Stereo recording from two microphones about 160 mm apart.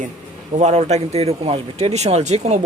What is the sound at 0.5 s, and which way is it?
Speech, 45° right (ahead or behind).